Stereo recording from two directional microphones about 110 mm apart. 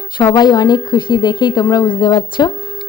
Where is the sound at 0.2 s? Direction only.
40° left (ahead or behind).